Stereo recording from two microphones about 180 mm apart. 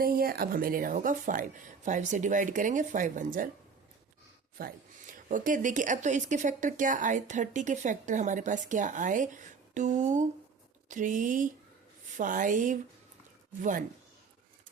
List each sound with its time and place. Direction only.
0.0 s a woman's voice: 55° right (ahead or behind)
4.5 s a woman's voice: 50° right (ahead or behind)